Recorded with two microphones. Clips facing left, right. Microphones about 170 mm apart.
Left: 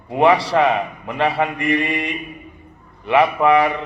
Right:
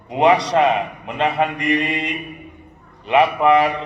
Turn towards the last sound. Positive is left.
turn(degrees=-20)  # may be behind; listen again after turning